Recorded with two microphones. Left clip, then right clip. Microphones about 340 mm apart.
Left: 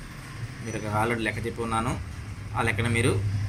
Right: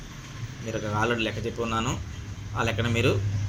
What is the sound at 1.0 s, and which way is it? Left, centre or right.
Speech, centre.